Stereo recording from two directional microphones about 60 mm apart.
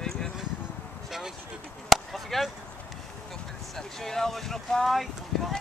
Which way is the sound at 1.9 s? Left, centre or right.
Centre.